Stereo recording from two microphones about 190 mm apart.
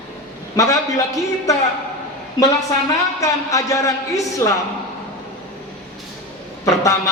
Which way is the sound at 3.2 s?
15° left (ahead or behind).